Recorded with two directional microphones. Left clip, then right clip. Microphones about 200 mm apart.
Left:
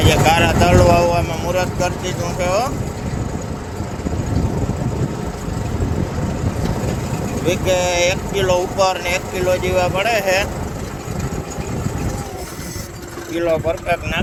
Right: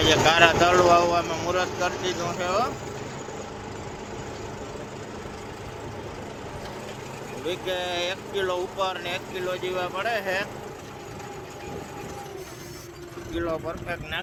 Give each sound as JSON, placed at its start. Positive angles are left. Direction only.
{"t": 0.0, "sound": "speech", "side_deg": -10}
{"t": 7.4, "sound": "speech", "side_deg": -5}
{"t": 13.3, "sound": "speech", "side_deg": -5}